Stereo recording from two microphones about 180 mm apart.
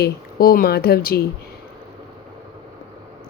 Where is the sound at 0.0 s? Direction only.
55° left (ahead or behind).